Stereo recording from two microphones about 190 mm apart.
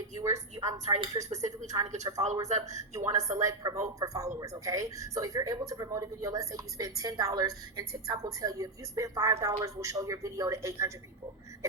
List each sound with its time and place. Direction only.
0.2 s a man's voice: 20° right (ahead or behind)
1.3 s speech: 35° right (ahead or behind)
2.1 s a woman's voice: 25° right (ahead or behind)